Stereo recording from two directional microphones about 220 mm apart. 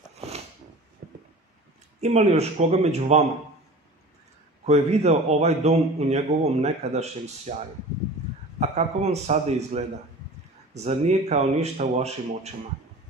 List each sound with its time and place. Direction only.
0.1 s a sound: 30° right (ahead or behind)
2.0 s a man's voice: 30° right (ahead or behind)
4.6 s a man's voice: 30° right (ahead or behind)
8.5 s a man's voice: 30° right (ahead or behind)